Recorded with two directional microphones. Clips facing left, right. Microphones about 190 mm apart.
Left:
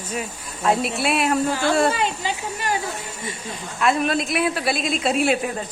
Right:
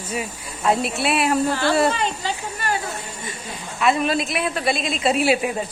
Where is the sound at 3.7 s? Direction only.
Centre (ahead or behind).